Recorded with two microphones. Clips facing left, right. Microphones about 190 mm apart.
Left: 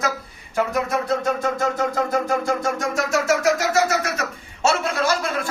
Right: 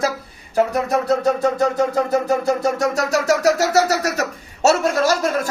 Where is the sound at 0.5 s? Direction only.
35° right (ahead or behind).